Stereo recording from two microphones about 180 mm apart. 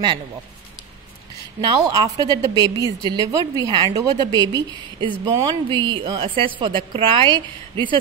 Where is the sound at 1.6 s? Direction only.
25° right (ahead or behind).